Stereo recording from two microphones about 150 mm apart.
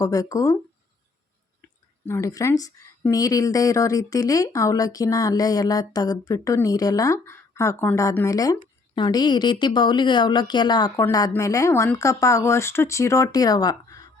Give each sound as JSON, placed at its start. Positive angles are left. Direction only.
{"t": 0.0, "sound": "speech", "side_deg": 20}
{"t": 2.0, "sound": "speech", "side_deg": 20}